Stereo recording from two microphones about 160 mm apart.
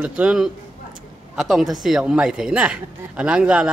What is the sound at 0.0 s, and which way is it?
A man's voice, 10° right (ahead or behind).